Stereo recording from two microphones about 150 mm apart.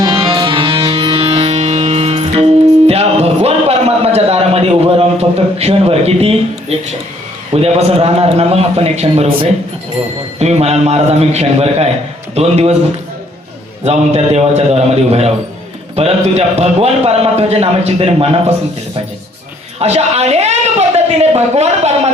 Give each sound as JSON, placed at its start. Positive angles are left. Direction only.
{"t": 0.0, "sound": "music", "side_deg": -30}
{"t": 7.5, "sound": "a man's voice", "side_deg": -45}
{"t": 13.8, "sound": "a man's voice", "side_deg": -45}
{"t": 19.8, "sound": "a woman's voice", "side_deg": -45}